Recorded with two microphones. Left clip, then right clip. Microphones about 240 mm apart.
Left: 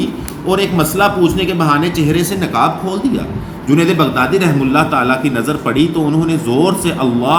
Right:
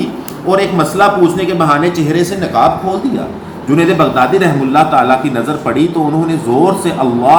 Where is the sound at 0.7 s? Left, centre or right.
Left.